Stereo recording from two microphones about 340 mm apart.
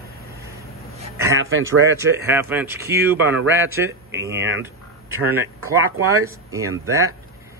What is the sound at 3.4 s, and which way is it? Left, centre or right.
Speech, right.